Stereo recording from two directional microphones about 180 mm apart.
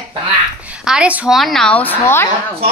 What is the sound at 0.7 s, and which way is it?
A woman's voice, 5° right (ahead or behind).